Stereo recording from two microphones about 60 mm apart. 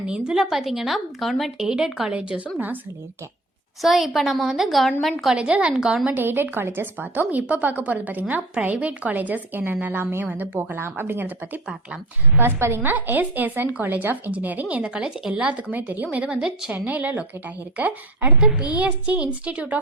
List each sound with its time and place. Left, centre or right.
0.1 s speech: centre
1.5 s speech: centre
3.8 s speech: centre
5.4 s a woman's voice: centre
6.1 s a woman's voice: right; by 16.7 s centre
16.7 s a woman's voice: right